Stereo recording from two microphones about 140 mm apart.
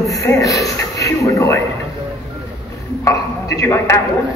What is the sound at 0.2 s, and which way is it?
Speech, 25° left (ahead or behind).